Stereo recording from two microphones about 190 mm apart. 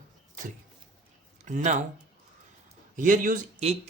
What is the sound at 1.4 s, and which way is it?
Speech, 40° right (ahead or behind).